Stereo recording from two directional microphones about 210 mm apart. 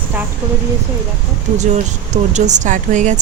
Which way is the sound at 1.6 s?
35° right (ahead or behind).